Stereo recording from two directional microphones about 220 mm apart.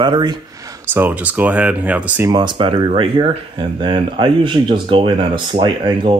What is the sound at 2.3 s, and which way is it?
Speech, 20° right (ahead or behind).